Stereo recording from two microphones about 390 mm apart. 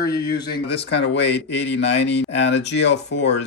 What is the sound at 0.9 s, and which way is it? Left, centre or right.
Speech, left.